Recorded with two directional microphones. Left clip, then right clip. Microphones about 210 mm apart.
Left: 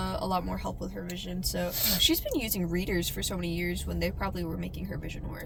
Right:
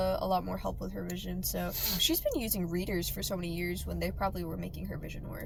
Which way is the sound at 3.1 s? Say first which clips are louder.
Left 3 dB; 20° right (ahead or behind).